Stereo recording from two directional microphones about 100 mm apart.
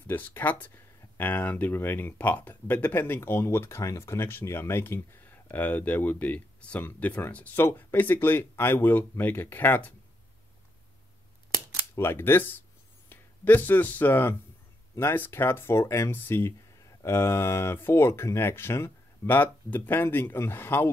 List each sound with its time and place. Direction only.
0.0 s speech: 20° left (ahead or behind)
11.9 s speech: 25° left (ahead or behind)